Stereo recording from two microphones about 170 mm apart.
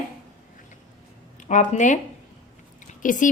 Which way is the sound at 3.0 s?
50° left (ahead or behind).